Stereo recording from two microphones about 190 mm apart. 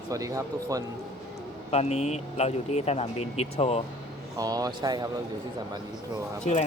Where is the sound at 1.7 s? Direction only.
35° left (ahead or behind).